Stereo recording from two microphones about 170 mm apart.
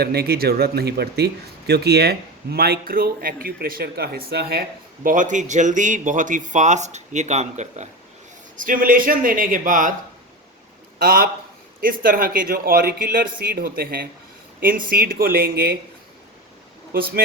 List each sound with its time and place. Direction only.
0.0 s speech: 70° right (ahead or behind)
5.0 s speech: 50° right (ahead or behind)
8.5 s speech: 55° right (ahead or behind)
11.0 s speech: 60° right (ahead or behind)